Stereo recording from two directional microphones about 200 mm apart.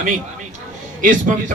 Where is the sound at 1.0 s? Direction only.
40° right (ahead or behind).